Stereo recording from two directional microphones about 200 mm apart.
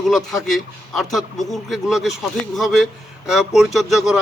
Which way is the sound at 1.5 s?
Centre (ahead or behind).